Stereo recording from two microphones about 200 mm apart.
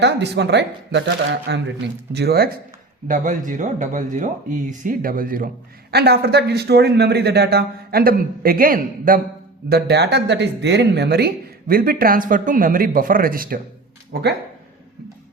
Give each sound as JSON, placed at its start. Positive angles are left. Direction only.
{"t": 0.0, "sound": "speech", "side_deg": -60}
{"t": 3.1, "sound": "speech", "side_deg": -40}